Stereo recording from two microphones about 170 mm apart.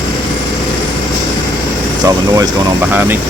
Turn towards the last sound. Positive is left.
turn(degrees=-10)  # may be behind; listen again after turning